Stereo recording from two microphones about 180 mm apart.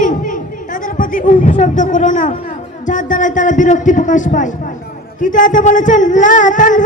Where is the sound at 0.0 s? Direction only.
45° left (ahead or behind).